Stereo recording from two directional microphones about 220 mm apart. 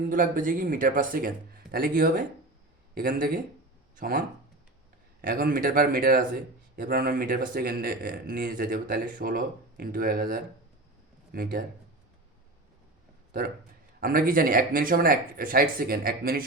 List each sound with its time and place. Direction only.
0.1 s speech: 40° right (ahead or behind)
5.2 s speech: 40° right (ahead or behind)
14.0 s speech: 40° right (ahead or behind)